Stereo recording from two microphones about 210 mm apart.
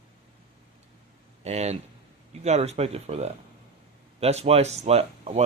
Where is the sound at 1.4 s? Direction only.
30° right (ahead or behind).